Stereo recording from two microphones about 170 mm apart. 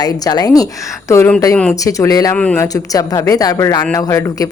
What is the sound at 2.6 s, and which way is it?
A woman's voice, 20° left (ahead or behind).